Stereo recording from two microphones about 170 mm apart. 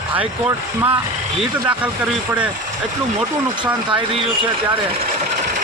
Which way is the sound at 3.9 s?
30° right (ahead or behind).